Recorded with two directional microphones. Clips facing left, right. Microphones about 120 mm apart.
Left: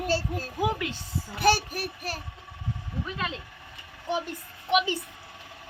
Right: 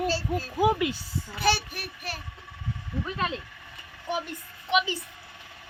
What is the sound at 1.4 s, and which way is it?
Speech, 45° left (ahead or behind).